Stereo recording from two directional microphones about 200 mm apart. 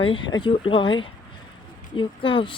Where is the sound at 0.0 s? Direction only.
25° left (ahead or behind).